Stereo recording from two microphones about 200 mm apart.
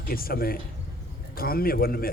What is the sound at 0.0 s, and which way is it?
A man's voice, 50° left (ahead or behind).